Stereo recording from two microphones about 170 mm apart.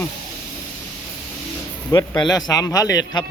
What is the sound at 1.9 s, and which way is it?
Speech, 25° left (ahead or behind).